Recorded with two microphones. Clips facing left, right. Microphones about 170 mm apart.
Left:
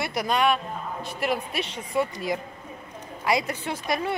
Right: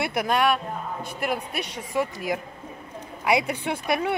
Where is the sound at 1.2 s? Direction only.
55° right (ahead or behind).